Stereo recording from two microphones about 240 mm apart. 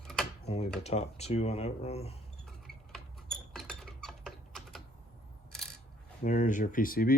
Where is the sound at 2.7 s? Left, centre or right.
Centre.